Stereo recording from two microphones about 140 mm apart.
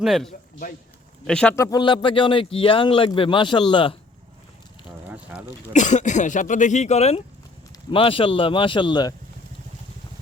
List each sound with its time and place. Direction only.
0.0 s speech: centre (ahead or behind)
1.3 s speech: 5° left (ahead or behind)
1.5 s speech: 20° left (ahead or behind)
1.8 s a man's voice: 35° left (ahead or behind)
5.0 s a sound: 10° right (ahead or behind)
5.7 s speech: 60° left (ahead or behind)
7.9 s a man's voice: 40° left (ahead or behind)